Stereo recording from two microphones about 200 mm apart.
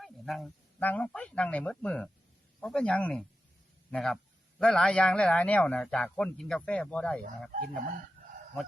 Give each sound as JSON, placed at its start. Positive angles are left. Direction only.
{"t": 0.0, "sound": "a man's voice", "side_deg": 0}
{"t": 7.5, "sound": "speech", "side_deg": -45}